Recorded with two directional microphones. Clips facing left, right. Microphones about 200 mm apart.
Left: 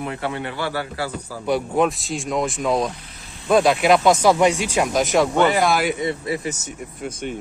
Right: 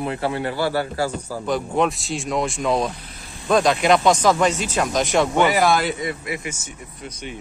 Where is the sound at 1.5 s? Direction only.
5° left (ahead or behind).